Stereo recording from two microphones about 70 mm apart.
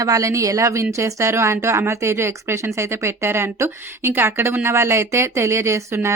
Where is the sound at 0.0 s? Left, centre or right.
Right.